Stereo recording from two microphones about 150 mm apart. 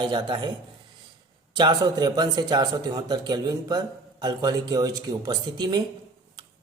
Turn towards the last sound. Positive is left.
turn(degrees=-25)  # may be behind; listen again after turning